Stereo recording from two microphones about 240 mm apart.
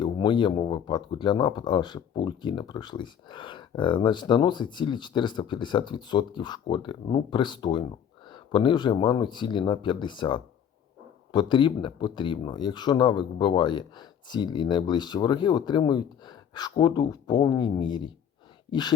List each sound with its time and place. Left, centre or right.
0.0 s speech: centre